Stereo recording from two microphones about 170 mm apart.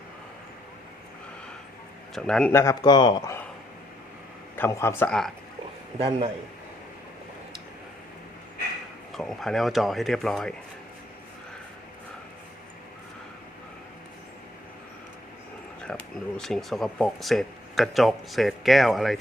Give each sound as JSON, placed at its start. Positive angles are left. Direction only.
{"t": 2.1, "sound": "speech", "side_deg": 5}
{"t": 4.5, "sound": "speech", "side_deg": 15}
{"t": 6.0, "sound": "a man's voice", "side_deg": -35}
{"t": 9.1, "sound": "speech", "side_deg": 0}
{"t": 15.9, "sound": "a sound", "side_deg": 5}
{"t": 16.4, "sound": "speech", "side_deg": 0}